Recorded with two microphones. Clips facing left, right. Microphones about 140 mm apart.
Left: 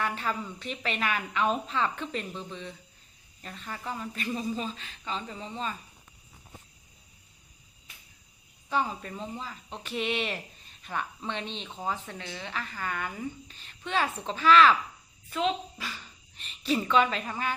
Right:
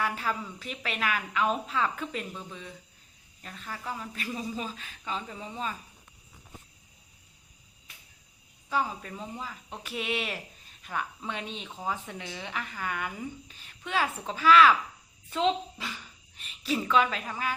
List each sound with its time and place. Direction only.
0.0 s a woman's voice: 5° right (ahead or behind)
8.7 s a woman's voice: 5° right (ahead or behind)
15.3 s a woman's voice: 25° right (ahead or behind)
16.0 s speech: 5° right (ahead or behind)